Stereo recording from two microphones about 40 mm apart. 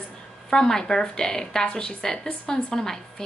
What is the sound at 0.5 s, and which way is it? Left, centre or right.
A woman's voice, centre.